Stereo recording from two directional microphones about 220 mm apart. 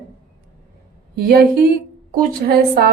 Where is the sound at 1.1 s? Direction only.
45° right (ahead or behind).